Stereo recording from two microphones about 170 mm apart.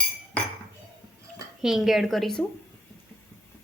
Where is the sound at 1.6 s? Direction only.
Centre (ahead or behind).